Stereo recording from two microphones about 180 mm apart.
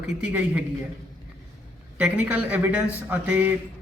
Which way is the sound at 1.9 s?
10° right (ahead or behind).